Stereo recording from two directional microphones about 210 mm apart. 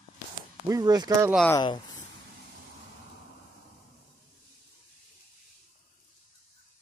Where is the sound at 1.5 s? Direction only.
20° left (ahead or behind).